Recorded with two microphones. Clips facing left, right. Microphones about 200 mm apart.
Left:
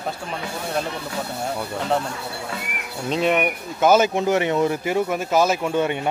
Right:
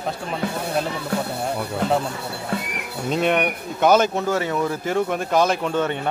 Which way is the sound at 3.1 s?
Centre (ahead or behind).